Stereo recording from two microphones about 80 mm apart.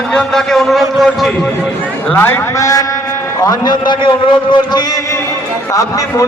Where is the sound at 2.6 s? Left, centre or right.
Left.